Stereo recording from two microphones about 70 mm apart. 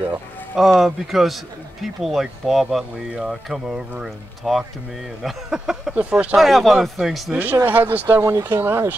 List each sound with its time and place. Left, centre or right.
0.6 s speech: centre
5.9 s speech: centre
6.3 s speech: centre
7.6 s speech: right
8.2 s speech: right